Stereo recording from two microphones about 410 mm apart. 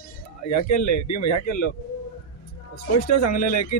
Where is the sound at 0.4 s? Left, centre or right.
Left.